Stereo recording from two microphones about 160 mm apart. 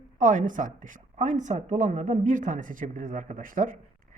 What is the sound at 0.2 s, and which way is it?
A woman's voice, 55° right (ahead or behind).